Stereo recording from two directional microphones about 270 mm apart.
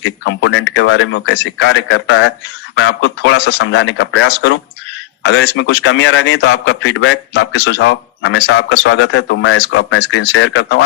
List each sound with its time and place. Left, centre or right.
0.0 s a man's voice: left